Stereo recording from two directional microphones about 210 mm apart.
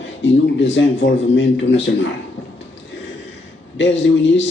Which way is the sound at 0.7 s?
60° left (ahead or behind).